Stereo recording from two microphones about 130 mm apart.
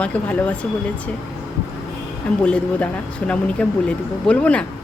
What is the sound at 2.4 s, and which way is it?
Speech, 10° left (ahead or behind).